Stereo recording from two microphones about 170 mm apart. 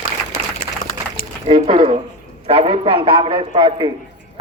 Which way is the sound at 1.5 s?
30° right (ahead or behind).